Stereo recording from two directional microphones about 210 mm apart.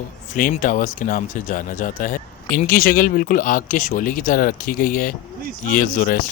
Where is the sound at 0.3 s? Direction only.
40° left (ahead or behind).